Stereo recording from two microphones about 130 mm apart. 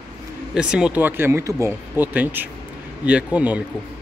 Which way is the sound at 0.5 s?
5° right (ahead or behind).